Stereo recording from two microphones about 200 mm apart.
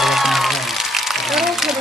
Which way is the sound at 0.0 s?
Centre (ahead or behind).